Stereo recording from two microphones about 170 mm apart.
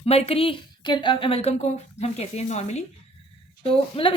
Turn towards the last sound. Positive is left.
turn(degrees=30)  # may be behind; listen again after turning